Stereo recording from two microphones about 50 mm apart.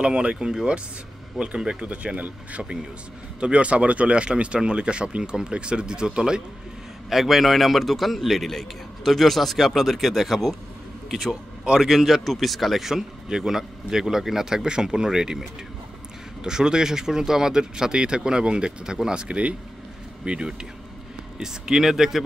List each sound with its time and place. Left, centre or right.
0.0 s speech: centre
3.3 s speech: right
7.1 s a man's voice: centre
16.4 s speech: centre